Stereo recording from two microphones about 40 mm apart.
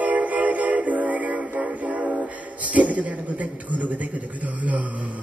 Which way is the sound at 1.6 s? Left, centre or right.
Right.